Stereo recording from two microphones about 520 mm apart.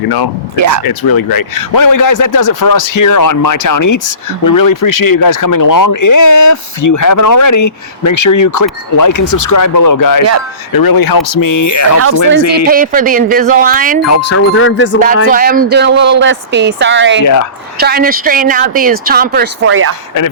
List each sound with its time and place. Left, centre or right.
0.5 s speech: right
0.9 s speech: left
12.6 s speech: centre
14.1 s wind chime: left
14.9 s a woman's voice: centre